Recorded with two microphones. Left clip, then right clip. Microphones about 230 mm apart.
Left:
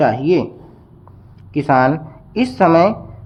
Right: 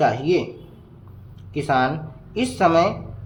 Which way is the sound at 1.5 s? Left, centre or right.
Left.